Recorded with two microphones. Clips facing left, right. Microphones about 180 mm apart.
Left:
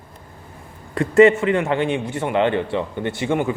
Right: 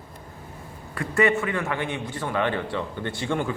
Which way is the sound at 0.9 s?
25° left (ahead or behind).